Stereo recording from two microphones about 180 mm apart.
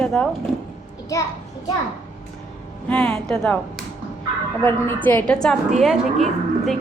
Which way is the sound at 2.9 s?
5° left (ahead or behind).